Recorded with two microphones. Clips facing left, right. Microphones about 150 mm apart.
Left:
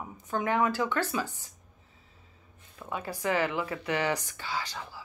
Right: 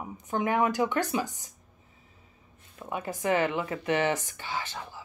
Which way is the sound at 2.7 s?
20° right (ahead or behind).